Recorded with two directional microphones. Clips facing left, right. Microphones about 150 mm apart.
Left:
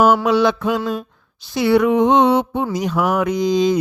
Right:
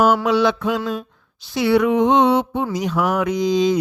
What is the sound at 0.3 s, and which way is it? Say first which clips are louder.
Speech: left 2 dB; 45° left (ahead or behind).